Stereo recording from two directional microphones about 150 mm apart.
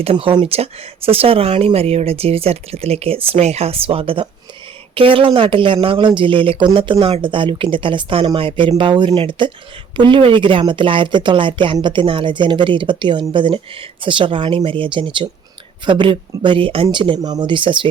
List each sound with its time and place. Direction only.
0.0 s speech: 40° right (ahead or behind)